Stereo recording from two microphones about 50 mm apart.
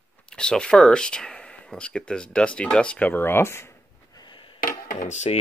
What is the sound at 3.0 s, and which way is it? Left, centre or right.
Speech, left.